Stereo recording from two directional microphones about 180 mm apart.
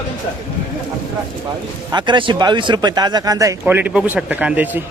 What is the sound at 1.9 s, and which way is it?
Speech, 25° right (ahead or behind).